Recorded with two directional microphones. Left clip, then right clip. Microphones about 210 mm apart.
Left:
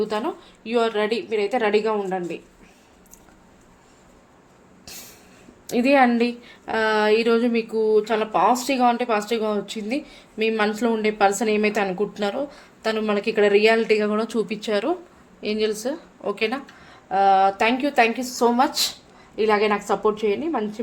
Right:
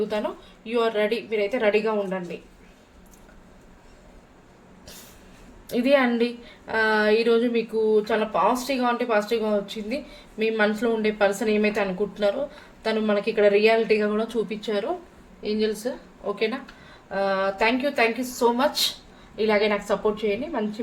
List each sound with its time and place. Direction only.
0.6 s a woman's voice: 45° left (ahead or behind)
5.6 s a woman's voice: 40° left (ahead or behind)